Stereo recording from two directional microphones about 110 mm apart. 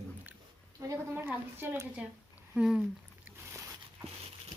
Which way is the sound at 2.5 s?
10° right (ahead or behind).